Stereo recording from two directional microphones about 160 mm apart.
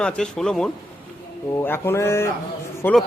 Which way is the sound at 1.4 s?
15° left (ahead or behind).